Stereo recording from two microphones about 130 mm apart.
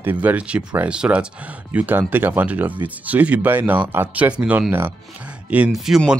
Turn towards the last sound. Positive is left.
turn(degrees=-5)  # may be behind; listen again after turning